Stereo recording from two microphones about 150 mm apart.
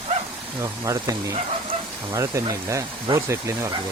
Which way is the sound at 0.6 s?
20° right (ahead or behind).